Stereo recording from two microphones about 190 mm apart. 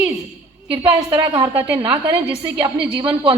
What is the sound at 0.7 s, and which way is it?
A woman's voice, 25° right (ahead or behind).